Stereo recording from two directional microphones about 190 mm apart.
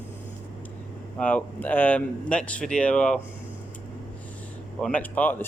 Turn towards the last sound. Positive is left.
turn(degrees=10)  # may be behind; listen again after turning